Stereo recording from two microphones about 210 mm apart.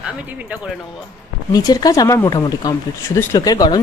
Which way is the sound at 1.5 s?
20° left (ahead or behind).